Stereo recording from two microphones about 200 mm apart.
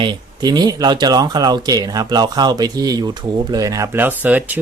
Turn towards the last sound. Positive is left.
turn(degrees=-10)  # may be behind; listen again after turning